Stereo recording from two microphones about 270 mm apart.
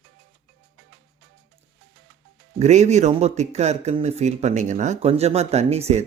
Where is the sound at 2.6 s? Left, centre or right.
Right.